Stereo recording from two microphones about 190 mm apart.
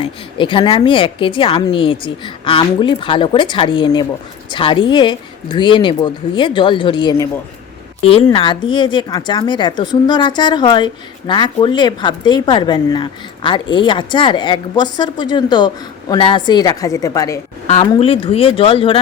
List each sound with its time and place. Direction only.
0.0 s a woman's voice: 25° left (ahead or behind)